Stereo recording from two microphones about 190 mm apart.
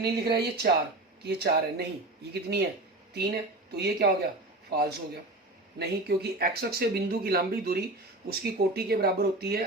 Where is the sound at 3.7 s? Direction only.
60° right (ahead or behind).